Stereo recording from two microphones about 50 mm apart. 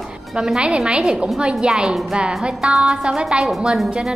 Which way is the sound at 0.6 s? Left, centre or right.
Centre.